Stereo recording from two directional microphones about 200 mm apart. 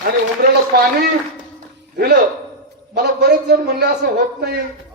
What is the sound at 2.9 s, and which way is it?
Speech, 55° right (ahead or behind).